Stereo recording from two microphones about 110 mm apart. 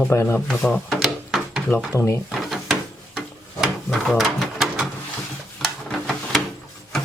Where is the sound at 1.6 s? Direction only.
20° left (ahead or behind).